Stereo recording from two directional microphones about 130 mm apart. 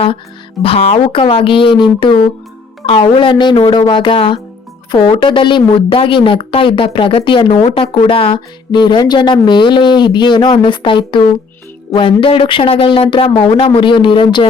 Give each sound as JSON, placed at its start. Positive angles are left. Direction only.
{"t": 0.6, "sound": "a woman's voice", "side_deg": 50}
{"t": 12.2, "sound": "a woman's voice", "side_deg": 40}